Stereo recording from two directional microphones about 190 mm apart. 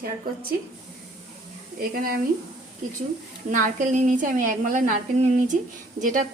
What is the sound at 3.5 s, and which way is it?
A woman's voice, 40° right (ahead or behind).